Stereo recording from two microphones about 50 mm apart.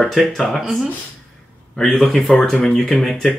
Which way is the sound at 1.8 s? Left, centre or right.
Centre.